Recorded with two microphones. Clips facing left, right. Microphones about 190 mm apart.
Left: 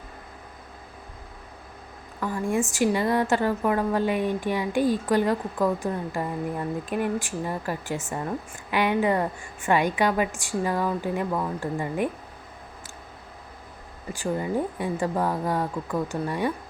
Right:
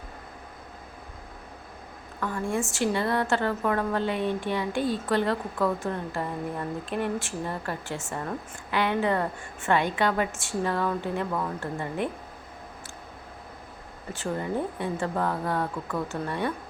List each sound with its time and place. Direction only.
2.2 s a woman's voice: 15° left (ahead or behind)
14.1 s a woman's voice: 10° left (ahead or behind)